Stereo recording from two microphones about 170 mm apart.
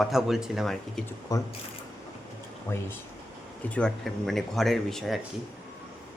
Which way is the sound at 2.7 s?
15° left (ahead or behind).